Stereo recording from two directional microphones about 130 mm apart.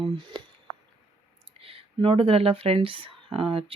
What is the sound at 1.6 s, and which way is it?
Speech, 45° right (ahead or behind).